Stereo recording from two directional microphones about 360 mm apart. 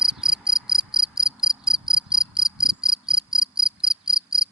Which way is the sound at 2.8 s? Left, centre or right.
Centre.